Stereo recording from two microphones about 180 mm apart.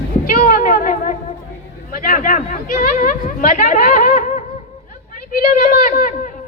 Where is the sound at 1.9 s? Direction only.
50° left (ahead or behind).